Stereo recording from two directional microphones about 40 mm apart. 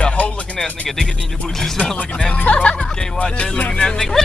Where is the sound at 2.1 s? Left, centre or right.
Left.